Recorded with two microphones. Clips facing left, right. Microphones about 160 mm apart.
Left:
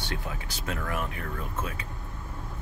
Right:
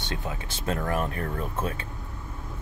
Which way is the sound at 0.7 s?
35° right (ahead or behind).